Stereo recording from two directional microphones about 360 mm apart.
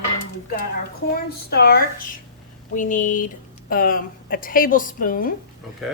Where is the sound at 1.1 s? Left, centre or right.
Left.